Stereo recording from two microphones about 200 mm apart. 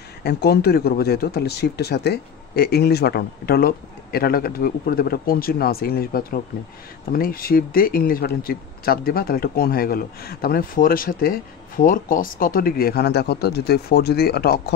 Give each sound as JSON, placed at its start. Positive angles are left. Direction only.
{"t": 0.2, "sound": "speech", "side_deg": 55}